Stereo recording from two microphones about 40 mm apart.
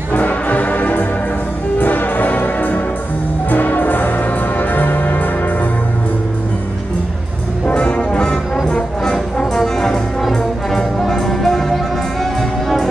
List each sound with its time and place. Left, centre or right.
0.1 s music: left
7.6 s music: left
9.6 s brass instrument: centre
11.0 s music: centre